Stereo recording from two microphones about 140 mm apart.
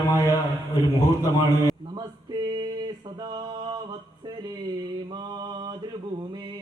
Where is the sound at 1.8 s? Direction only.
30° right (ahead or behind).